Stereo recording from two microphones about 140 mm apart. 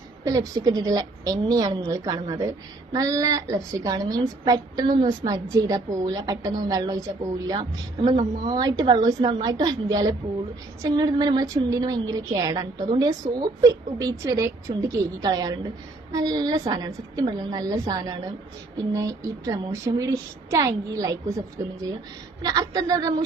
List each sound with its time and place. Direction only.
0.3 s a woman's voice: 25° right (ahead or behind)
19.5 s a woman's voice: 25° right (ahead or behind)